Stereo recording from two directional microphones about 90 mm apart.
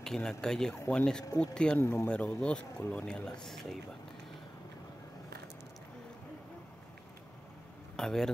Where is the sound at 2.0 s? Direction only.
10° left (ahead or behind).